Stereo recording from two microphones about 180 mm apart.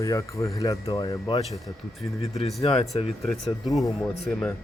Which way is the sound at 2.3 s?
35° left (ahead or behind).